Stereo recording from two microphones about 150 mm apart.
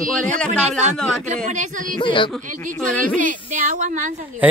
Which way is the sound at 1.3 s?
55° right (ahead or behind).